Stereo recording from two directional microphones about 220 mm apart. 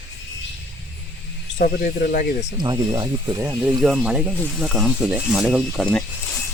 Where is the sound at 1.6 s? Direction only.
35° left (ahead or behind).